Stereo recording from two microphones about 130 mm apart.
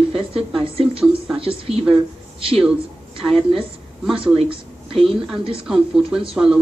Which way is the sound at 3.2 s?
45° right (ahead or behind).